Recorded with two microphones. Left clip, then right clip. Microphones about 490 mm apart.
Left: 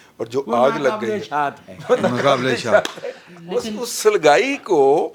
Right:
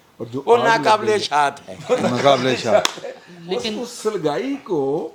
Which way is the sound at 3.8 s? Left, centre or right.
Left.